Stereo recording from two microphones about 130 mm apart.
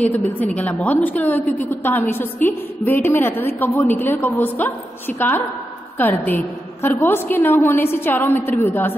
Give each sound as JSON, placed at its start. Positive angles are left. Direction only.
{"t": 0.6, "sound": "a woman's voice", "side_deg": 10}